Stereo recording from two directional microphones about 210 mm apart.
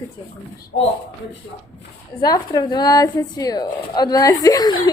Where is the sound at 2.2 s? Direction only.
20° left (ahead or behind).